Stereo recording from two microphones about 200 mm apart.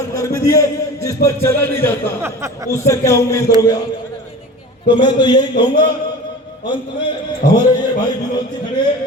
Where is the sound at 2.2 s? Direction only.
15° right (ahead or behind).